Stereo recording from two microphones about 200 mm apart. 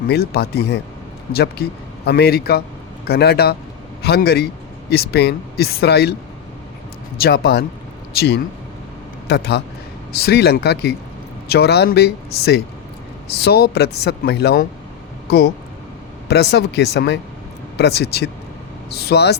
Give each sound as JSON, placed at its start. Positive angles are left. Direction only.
{"t": 0.1, "sound": "a man's voice", "side_deg": 50}
{"t": 7.2, "sound": "speech", "side_deg": 55}
{"t": 16.3, "sound": "speech", "side_deg": 55}